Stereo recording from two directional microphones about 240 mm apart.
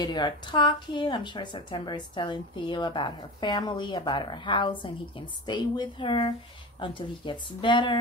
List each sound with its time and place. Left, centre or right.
0.0 s a woman's voice: centre